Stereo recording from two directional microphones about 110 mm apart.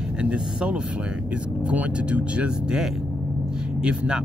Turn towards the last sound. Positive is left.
turn(degrees=-10)  # may be behind; listen again after turning